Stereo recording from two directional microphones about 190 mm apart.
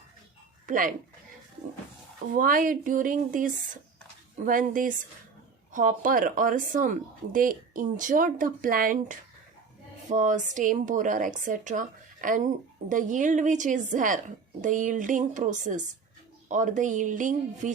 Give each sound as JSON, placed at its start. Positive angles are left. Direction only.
{"t": 0.7, "sound": "speech", "side_deg": -45}
{"t": 2.3, "sound": "a woman's voice", "side_deg": -45}